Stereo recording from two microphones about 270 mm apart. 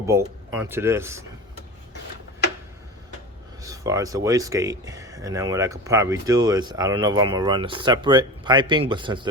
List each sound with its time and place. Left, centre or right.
0.6 s speech: centre
3.6 s speech: centre